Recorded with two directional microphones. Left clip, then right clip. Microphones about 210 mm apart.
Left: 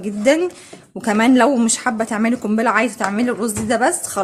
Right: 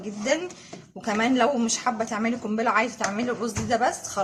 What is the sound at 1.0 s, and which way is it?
Speech, 55° left (ahead or behind).